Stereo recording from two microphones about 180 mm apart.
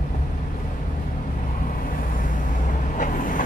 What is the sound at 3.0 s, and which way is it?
Vehicle, 45° left (ahead or behind).